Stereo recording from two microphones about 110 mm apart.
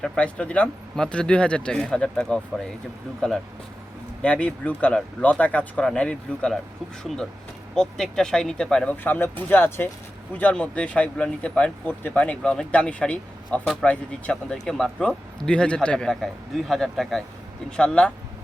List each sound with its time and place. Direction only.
0.0 s speech: 10° left (ahead or behind)
7.8 s speech: 5° left (ahead or behind)